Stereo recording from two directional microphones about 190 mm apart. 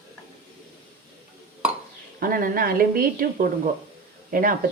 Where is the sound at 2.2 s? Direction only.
50° right (ahead or behind).